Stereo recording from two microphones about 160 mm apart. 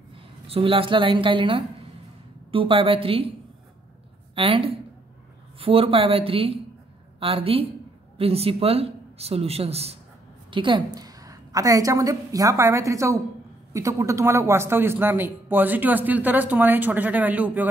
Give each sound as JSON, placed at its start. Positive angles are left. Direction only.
{"t": 0.1, "sound": "a woman's voice", "side_deg": -35}
{"t": 4.4, "sound": "a woman's voice", "side_deg": -35}